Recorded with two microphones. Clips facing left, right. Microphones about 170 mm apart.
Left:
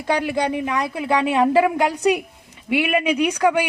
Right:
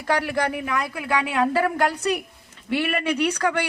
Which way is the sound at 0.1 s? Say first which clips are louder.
Left 2 dB; 20° left (ahead or behind).